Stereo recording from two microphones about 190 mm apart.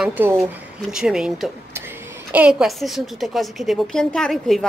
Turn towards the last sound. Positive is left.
turn(degrees=0)  # may be behind; listen again after turning